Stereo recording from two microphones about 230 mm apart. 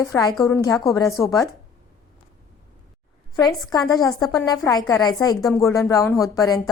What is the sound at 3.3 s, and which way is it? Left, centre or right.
A woman's voice, centre.